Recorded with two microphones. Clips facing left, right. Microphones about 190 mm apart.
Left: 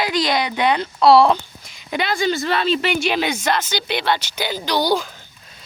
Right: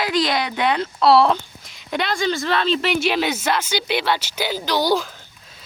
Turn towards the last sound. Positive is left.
turn(degrees=0)  # may be behind; listen again after turning